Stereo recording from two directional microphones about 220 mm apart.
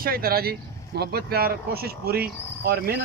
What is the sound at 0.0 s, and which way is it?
Speech, 40° right (ahead or behind).